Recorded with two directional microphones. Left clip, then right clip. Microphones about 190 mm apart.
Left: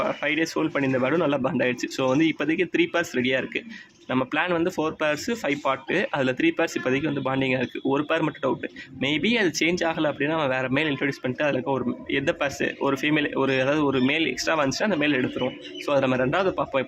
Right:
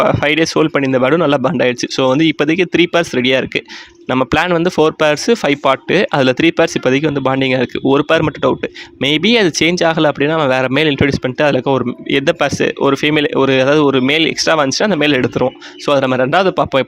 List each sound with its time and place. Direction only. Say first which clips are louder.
0.0 s speech: right 12 dB; 45° right (ahead or behind)